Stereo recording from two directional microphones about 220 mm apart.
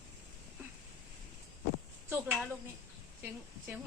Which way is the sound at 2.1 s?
10° right (ahead or behind).